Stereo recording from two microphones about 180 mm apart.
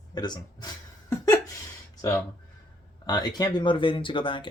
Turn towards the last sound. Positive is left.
turn(degrees=30)  # may be behind; listen again after turning